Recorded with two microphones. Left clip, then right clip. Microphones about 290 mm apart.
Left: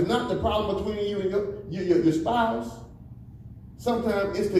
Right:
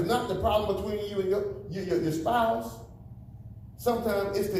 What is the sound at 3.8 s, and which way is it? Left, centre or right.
Speech, right.